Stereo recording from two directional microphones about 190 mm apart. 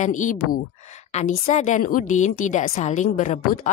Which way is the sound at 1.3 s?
45° left (ahead or behind).